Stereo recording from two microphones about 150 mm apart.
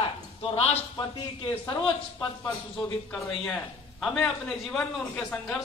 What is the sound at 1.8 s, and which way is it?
Speech, 10° left (ahead or behind).